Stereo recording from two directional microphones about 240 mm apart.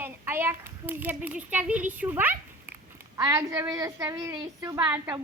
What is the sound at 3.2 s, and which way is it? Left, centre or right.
A child's voice, centre.